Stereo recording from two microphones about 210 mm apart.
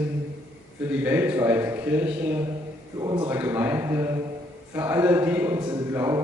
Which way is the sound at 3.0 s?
20° right (ahead or behind).